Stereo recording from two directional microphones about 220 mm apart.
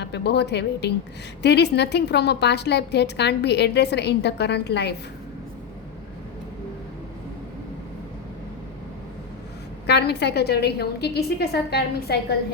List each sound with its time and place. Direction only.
0.0 s a woman's voice: 50° left (ahead or behind)
9.8 s a woman's voice: 50° left (ahead or behind)